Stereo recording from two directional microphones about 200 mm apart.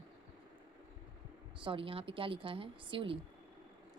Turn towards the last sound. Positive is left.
turn(degrees=-25)  # may be behind; listen again after turning